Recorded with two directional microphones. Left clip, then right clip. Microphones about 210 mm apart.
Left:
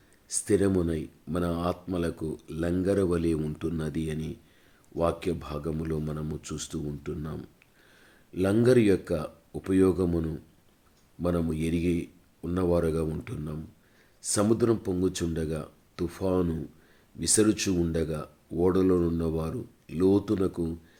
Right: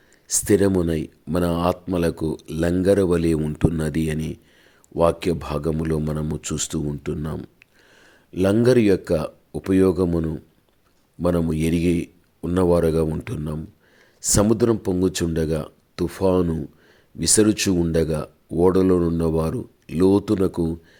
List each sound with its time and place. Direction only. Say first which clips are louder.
0.3 s speech: right 7 dB; 35° right (ahead or behind)